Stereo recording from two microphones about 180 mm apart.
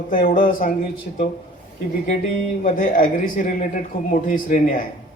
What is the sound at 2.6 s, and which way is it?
A man's voice, 50° left (ahead or behind).